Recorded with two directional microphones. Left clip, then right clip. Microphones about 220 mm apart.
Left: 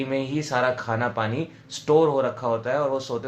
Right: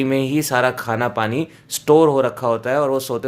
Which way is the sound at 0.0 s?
50° right (ahead or behind).